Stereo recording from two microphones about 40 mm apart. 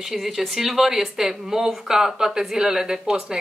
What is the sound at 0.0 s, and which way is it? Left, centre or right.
Speech, centre.